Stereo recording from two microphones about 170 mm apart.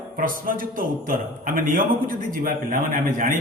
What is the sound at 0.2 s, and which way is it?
A man's voice, 55° right (ahead or behind).